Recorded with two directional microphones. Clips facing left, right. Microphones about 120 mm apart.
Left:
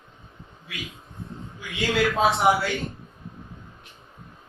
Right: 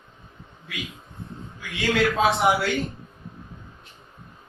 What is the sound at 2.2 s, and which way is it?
Speech, centre (ahead or behind).